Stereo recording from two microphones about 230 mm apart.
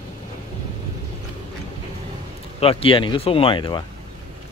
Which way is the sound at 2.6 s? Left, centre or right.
Left.